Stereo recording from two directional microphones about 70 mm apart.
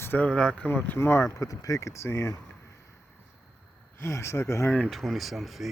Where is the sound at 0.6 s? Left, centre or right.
Left.